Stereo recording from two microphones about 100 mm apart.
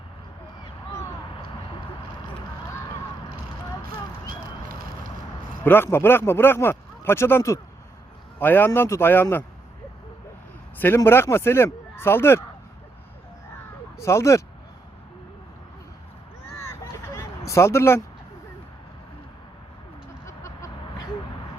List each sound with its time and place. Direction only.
5.6 s speech: 20° left (ahead or behind)
10.8 s speech: 20° left (ahead or behind)
14.0 s speech: 30° left (ahead or behind)
16.5 s a sound: 25° left (ahead or behind)
20.2 s vehicle: 30° left (ahead or behind)